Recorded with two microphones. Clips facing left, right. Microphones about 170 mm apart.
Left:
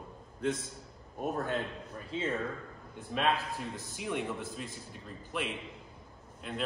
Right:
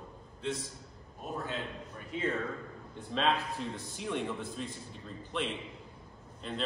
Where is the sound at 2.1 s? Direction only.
25° left (ahead or behind).